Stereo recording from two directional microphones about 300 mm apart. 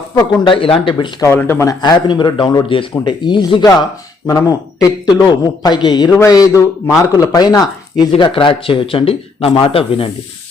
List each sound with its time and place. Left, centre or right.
0.2 s a man's voice: centre